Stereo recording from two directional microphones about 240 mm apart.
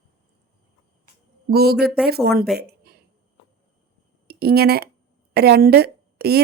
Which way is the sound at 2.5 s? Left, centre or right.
Right.